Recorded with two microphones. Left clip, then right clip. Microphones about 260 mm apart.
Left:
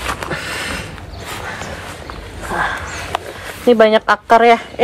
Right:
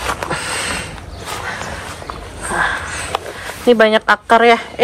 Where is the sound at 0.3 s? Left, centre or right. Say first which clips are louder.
Right 2 dB; right.